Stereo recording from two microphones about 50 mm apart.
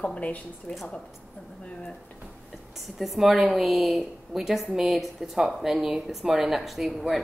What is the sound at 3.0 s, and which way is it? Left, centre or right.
Speech, centre.